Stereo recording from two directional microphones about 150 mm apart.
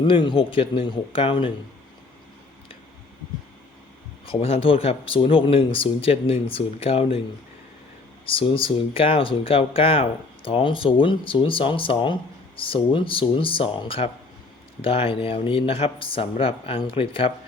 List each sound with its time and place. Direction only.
0.0 s speech: 35° left (ahead or behind)
4.3 s speech: 40° left (ahead or behind)
8.3 s speech: 35° left (ahead or behind)